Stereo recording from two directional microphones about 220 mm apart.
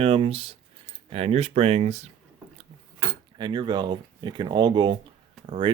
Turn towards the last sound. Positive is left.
turn(degrees=-30)  # may be behind; listen again after turning